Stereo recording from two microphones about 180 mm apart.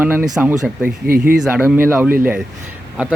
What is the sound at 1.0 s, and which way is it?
Speech, 55° right (ahead or behind).